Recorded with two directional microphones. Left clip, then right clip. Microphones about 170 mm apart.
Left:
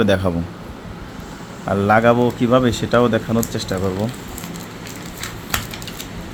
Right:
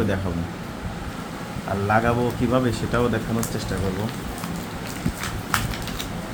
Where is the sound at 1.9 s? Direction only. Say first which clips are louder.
Left 7 dB; 65° left (ahead or behind).